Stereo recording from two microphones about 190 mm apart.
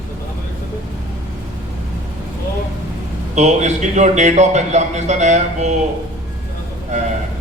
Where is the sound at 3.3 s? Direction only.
35° right (ahead or behind).